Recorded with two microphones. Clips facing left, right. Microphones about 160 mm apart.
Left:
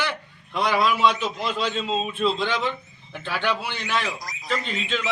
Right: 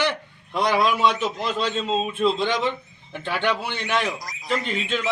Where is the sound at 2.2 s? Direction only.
15° right (ahead or behind).